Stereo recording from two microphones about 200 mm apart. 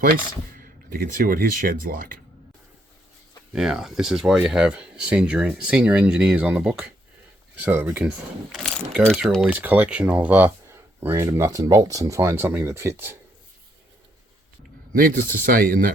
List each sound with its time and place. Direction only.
0.6 s speech: 45° right (ahead or behind)
3.5 s speech: 5° right (ahead or behind)
8.5 s speech: centre (ahead or behind)
14.9 s speech: 45° right (ahead or behind)